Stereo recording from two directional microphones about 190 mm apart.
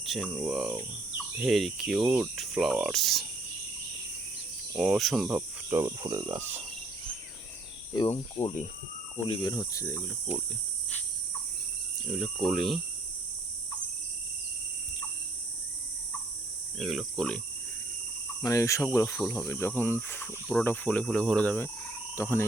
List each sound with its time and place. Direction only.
0.0 s a sound: centre (ahead or behind)
0.4 s speech: centre (ahead or behind)
4.8 s speech: centre (ahead or behind)
5.7 s cricket: 20° right (ahead or behind)
7.9 s speech: 25° left (ahead or behind)
12.1 s speech: centre (ahead or behind)
16.7 s speech: centre (ahead or behind)
18.4 s speech: 15° left (ahead or behind)